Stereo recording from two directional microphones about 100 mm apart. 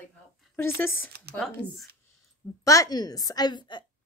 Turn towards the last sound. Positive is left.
turn(degrees=45)  # may be behind; listen again after turning